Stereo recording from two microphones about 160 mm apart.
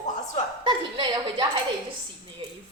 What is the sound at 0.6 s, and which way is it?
Speech, 30° right (ahead or behind).